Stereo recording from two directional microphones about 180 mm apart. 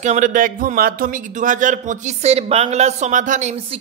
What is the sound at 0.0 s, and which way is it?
A man's voice, 40° right (ahead or behind).